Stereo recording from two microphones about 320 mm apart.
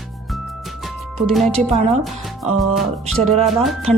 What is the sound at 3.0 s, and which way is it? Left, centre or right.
Music, centre.